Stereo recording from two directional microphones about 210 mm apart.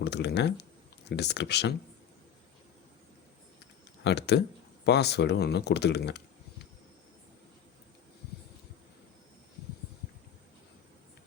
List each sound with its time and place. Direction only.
0.0 s speech: 55° left (ahead or behind)
4.0 s speech: 55° left (ahead or behind)